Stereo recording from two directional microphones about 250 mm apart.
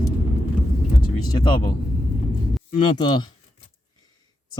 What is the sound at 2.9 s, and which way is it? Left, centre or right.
Speech, centre.